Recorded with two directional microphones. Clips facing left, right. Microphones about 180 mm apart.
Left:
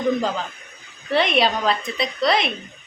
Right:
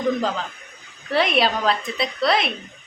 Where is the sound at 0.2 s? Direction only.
5° left (ahead or behind).